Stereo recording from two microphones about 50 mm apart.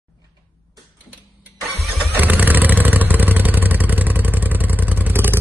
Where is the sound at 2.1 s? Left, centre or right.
Right.